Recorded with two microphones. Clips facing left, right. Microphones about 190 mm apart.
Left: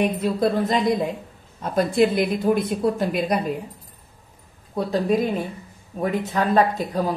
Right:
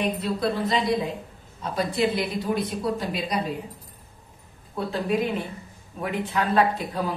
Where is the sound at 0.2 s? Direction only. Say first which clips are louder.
Left 5 dB; 45° left (ahead or behind).